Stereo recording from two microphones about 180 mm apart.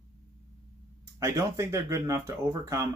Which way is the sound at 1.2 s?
15° right (ahead or behind).